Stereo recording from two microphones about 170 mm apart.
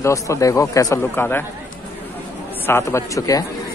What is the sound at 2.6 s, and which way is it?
Speech, 15° left (ahead or behind).